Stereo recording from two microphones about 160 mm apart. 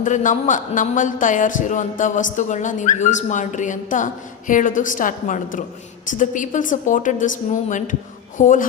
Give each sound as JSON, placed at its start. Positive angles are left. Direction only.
{"t": 0.0, "sound": "speech", "side_deg": 50}